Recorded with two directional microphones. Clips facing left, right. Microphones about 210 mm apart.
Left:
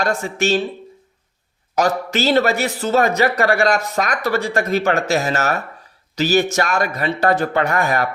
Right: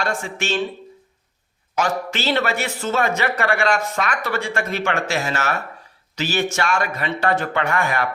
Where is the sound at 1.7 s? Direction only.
40° left (ahead or behind).